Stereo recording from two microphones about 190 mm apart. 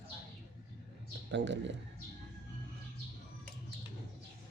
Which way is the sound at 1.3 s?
70° right (ahead or behind).